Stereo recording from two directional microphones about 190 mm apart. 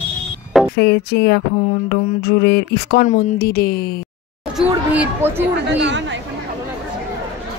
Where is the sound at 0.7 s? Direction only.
60° left (ahead or behind).